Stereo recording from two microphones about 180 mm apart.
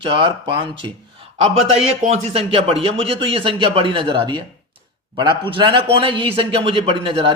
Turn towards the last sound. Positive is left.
turn(degrees=-30)  # may be behind; listen again after turning